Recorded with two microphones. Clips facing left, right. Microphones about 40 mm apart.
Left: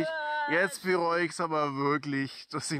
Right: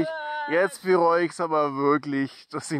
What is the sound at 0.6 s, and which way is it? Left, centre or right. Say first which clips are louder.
Speech: right 10 dB; right.